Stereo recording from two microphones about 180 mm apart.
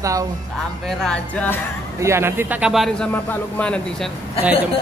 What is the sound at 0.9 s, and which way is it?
Speech, 5° left (ahead or behind).